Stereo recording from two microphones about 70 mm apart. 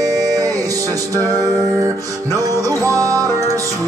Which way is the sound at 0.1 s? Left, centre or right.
Right.